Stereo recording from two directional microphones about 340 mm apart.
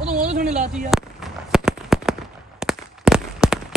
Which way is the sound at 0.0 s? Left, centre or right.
Right.